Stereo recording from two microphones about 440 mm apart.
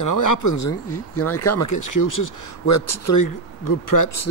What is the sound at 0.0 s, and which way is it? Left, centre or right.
Speech, left.